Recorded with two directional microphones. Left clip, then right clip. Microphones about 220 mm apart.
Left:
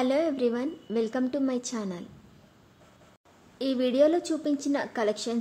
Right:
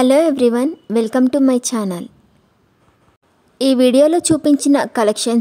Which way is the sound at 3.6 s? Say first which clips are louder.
Right 12 dB; 55° right (ahead or behind).